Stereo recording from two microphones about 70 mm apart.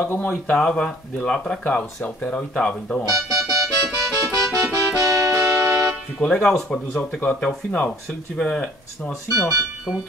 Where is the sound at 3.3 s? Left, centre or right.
Right.